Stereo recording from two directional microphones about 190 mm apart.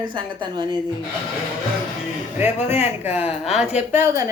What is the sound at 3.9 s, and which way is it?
Speech, 15° right (ahead or behind).